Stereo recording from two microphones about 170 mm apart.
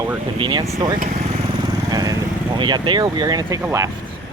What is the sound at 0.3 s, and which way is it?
Speech, 30° right (ahead or behind).